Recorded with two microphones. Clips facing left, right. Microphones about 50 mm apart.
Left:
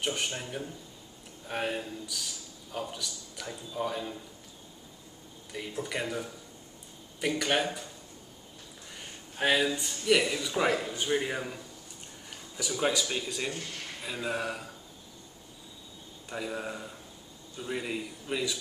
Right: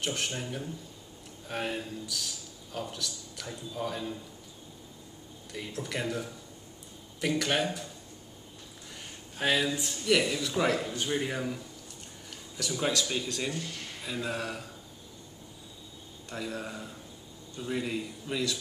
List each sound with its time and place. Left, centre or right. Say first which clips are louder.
0.0 s a man's voice: left 1 dB; centre
5.5 s a man's voice: left 1 dB; centre
9.4 s a man's voice: left 1 dB; centre
16.3 s a man's voice: left 2 dB; centre